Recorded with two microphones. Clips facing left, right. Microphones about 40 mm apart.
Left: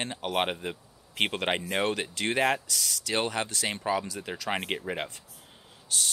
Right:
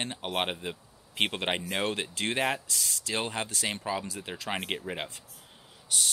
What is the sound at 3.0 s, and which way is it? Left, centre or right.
Speech, left.